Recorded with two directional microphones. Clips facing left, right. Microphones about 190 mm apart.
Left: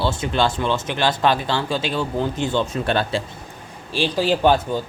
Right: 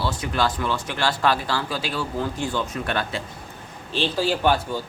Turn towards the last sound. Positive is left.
turn(degrees=20)  # may be behind; listen again after turning